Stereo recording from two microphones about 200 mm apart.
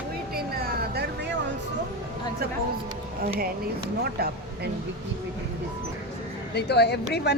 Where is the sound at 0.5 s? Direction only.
50° right (ahead or behind).